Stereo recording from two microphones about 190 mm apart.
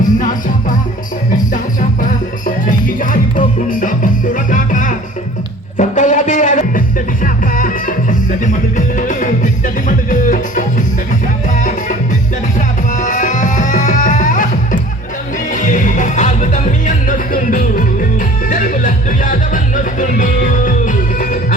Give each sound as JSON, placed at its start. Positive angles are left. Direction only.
{"t": 0.0, "sound": "music", "side_deg": 45}
{"t": 2.6, "sound": "music", "side_deg": 45}
{"t": 12.5, "sound": "music", "side_deg": 40}